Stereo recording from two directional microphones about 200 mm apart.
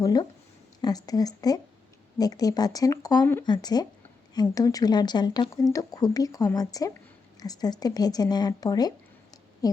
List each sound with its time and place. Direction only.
0.0 s speech: 20° left (ahead or behind)